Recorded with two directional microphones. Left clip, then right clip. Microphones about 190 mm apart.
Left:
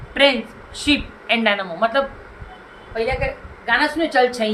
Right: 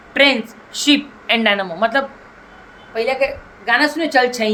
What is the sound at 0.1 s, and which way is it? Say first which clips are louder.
A woman's voice: right 2 dB; 45° right (ahead or behind).